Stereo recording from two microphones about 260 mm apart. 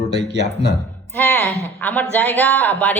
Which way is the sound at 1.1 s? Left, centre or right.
Centre.